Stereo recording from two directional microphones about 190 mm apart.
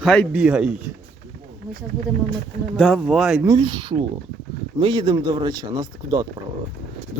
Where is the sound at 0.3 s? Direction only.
5° right (ahead or behind).